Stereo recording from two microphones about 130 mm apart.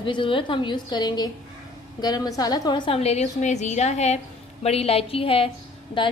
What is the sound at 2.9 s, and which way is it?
A woman's voice, 55° left (ahead or behind).